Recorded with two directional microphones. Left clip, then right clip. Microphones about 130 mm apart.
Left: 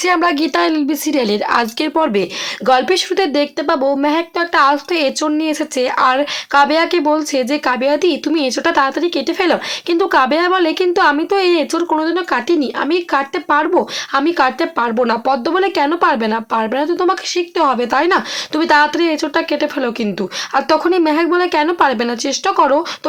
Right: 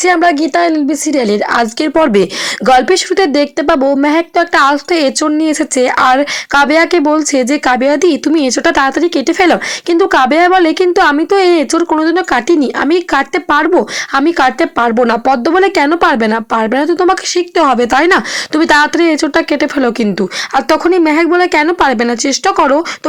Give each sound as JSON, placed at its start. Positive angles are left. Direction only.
{"t": 0.0, "sound": "a woman's voice", "side_deg": -30}
{"t": 2.0, "sound": "speech", "side_deg": -50}
{"t": 2.6, "sound": "speech", "side_deg": -40}
{"t": 20.5, "sound": "speech", "side_deg": -35}